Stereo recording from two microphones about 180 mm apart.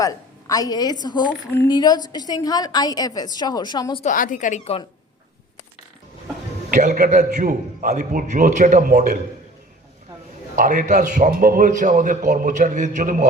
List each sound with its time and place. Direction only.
0.0 s a woman's voice: 20° left (ahead or behind)
4.0 s a woman's voice: 45° left (ahead or behind)
6.7 s a man's voice: 45° right (ahead or behind)
10.5 s a man's voice: 45° right (ahead or behind)